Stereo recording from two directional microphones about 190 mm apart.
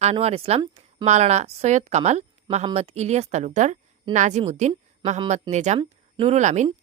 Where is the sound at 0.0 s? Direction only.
35° right (ahead or behind).